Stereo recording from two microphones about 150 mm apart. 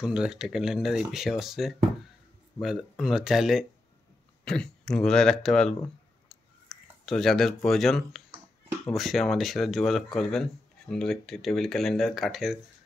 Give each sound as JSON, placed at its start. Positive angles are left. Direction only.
{"t": 0.0, "sound": "speech", "side_deg": -5}
{"t": 6.2, "sound": "a sound", "side_deg": 0}
{"t": 8.8, "sound": "speech", "side_deg": 0}